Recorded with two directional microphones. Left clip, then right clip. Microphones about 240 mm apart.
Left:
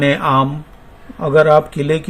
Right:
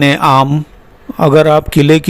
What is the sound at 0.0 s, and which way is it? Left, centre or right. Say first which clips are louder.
A man's voice: right 5 dB; right.